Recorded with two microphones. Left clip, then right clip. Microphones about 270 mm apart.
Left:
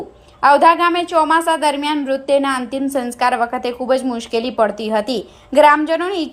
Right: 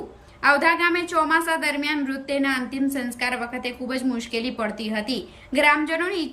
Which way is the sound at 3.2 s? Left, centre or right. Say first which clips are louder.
Left 11 dB; left.